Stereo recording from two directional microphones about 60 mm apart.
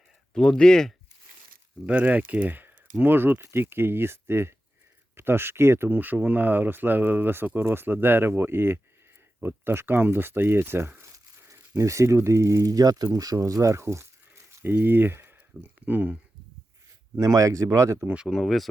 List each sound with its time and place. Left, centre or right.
0.3 s speech: centre
1.9 s speech: right
11.1 s a sound: right
11.8 s speech: right
13.1 s speech: right
14.6 s speech: right
15.6 s speech: right
17.2 s speech: right
18.3 s speech: centre